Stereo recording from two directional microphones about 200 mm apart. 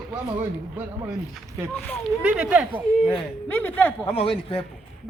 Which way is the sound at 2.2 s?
5° right (ahead or behind).